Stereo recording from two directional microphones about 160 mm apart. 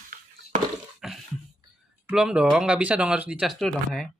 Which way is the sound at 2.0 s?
5° right (ahead or behind).